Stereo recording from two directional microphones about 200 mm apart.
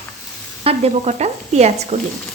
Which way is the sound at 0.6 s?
30° right (ahead or behind).